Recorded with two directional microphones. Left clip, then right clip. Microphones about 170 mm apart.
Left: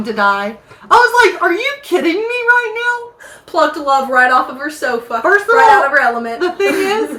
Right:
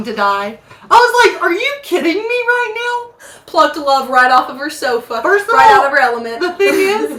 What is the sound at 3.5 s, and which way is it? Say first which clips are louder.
Speech: right 1 dB; 25° right (ahead or behind).